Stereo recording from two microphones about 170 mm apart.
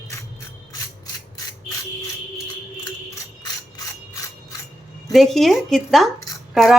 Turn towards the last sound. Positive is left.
turn(degrees=0)  # may be behind; listen again after turning